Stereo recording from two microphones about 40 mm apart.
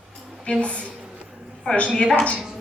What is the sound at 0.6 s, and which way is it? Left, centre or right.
Speech, left.